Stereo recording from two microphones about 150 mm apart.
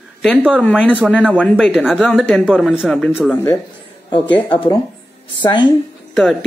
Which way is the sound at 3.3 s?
15° left (ahead or behind).